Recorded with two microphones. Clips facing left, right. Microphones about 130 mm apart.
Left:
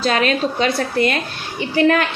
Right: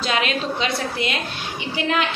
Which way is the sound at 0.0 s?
45° left (ahead or behind).